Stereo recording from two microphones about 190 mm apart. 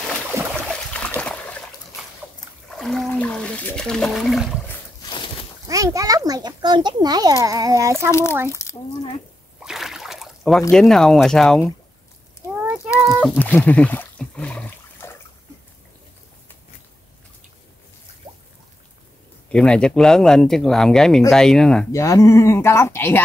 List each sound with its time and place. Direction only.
0.3 s boat: 15° right (ahead or behind)
0.9 s a sound: 5° left (ahead or behind)
2.7 s water: centre (ahead or behind)
5.0 s a sound: 25° left (ahead or behind)
5.7 s a child's voice: 15° right (ahead or behind)
8.1 s speech: 15° left (ahead or behind)
8.5 s a sound: 15° left (ahead or behind)
9.6 s boat: centre (ahead or behind)
10.7 s speech: centre (ahead or behind)
12.5 s child singing: 5° right (ahead or behind)
13.4 s a sound: 10° left (ahead or behind)
18.3 s drip: 25° right (ahead or behind)
19.5 s speech: 5° left (ahead or behind)
21.9 s speech: 15° left (ahead or behind)